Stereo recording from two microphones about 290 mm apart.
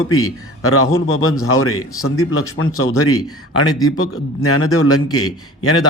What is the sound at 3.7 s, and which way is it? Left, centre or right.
Speech, centre.